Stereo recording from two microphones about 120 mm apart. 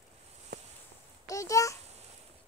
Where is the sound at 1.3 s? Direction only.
25° left (ahead or behind).